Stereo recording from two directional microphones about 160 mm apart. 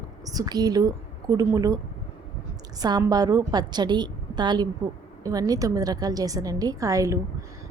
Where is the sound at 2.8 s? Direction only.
25° right (ahead or behind).